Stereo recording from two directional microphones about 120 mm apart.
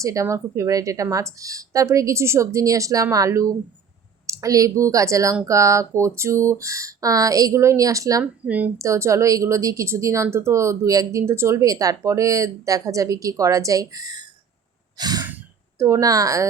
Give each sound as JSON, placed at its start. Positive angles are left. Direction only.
{"t": 0.0, "sound": "a woman's voice", "side_deg": -25}
{"t": 8.2, "sound": "speech", "side_deg": -10}
{"t": 8.8, "sound": "a woman's voice", "side_deg": -25}
{"t": 14.9, "sound": "sigh", "side_deg": -35}
{"t": 15.8, "sound": "a woman's voice", "side_deg": -25}